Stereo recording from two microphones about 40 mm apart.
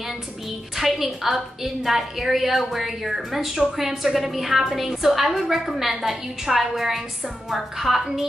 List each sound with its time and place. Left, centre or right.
0.7 s a woman's voice: centre